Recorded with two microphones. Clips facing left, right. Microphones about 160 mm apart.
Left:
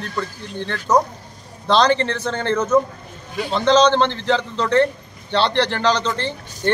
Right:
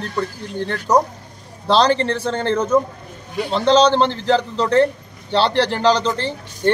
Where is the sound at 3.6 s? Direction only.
35° right (ahead or behind).